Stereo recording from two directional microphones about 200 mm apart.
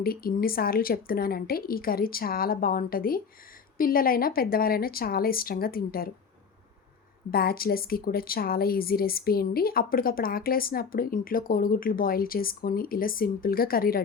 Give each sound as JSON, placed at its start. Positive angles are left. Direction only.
{"t": 0.0, "sound": "a woman's voice", "side_deg": 50}
{"t": 7.3, "sound": "a woman's voice", "side_deg": 50}